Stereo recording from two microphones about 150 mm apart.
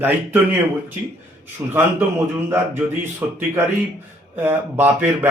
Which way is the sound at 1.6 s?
15° right (ahead or behind).